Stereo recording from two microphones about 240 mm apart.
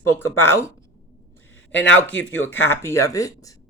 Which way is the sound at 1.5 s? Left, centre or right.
Left.